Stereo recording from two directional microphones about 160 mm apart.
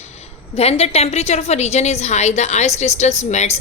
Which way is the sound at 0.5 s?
40° left (ahead or behind).